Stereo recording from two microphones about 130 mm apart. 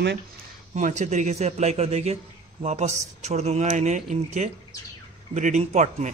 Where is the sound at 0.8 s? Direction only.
70° right (ahead or behind).